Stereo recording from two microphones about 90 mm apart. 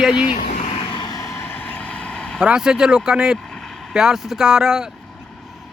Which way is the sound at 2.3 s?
10° right (ahead or behind).